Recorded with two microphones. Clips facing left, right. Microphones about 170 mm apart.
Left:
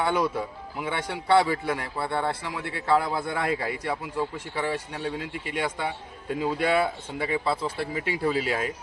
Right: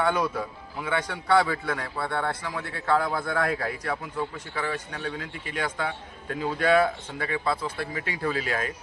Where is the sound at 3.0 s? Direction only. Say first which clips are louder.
Right 1 dB; 25° left (ahead or behind).